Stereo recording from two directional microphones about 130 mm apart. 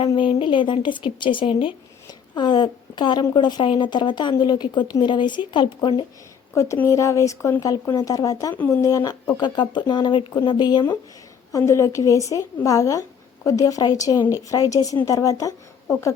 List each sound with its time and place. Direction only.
0.1 s a woman's voice: 40° left (ahead or behind)
6.5 s a woman's voice: 20° left (ahead or behind)
11.5 s speech: 20° left (ahead or behind)